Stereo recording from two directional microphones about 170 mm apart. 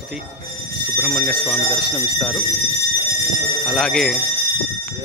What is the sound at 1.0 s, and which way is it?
Speech, 5° right (ahead or behind).